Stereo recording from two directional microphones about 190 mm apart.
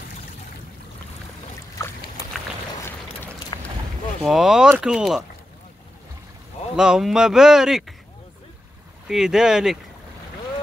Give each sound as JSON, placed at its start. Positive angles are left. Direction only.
{"t": 1.8, "sound": "boat", "side_deg": 15}
{"t": 3.5, "sound": "boat", "side_deg": 25}
{"t": 4.2, "sound": "speech", "side_deg": 0}
{"t": 6.8, "sound": "speech", "side_deg": -5}
{"t": 9.0, "sound": "speech", "side_deg": -5}